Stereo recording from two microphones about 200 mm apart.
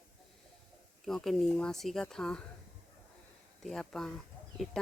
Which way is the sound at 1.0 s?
Centre (ahead or behind).